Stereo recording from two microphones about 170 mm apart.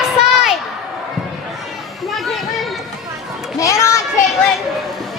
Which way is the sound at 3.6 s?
15° left (ahead or behind).